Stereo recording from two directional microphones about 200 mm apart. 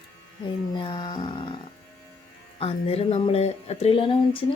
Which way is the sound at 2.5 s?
30° left (ahead or behind).